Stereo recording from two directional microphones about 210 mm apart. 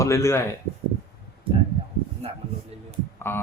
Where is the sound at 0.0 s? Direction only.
15° left (ahead or behind).